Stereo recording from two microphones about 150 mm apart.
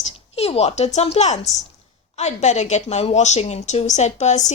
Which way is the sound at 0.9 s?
45° left (ahead or behind).